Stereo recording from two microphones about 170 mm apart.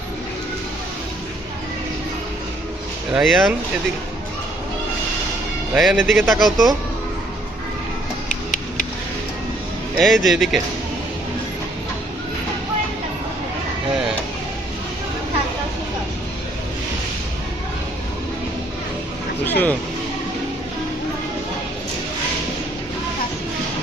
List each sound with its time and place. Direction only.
3.1 s speech: centre (ahead or behind)
5.7 s speech: 5° right (ahead or behind)
8.3 s tick-tock: 50° left (ahead or behind)
10.0 s speech: centre (ahead or behind)
19.5 s speech: 10° left (ahead or behind)